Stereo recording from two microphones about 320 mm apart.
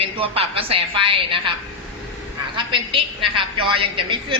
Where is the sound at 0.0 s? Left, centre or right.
Centre.